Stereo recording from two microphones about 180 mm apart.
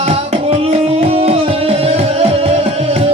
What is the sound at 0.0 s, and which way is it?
Music, 35° right (ahead or behind).